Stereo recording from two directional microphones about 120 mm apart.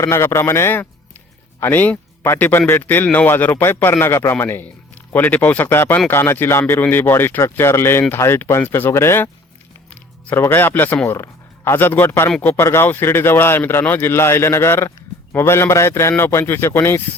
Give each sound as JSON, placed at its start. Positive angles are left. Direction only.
{"t": 0.0, "sound": "a man's voice", "side_deg": 20}